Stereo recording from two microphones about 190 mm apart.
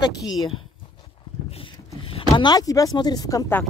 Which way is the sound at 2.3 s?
20° left (ahead or behind).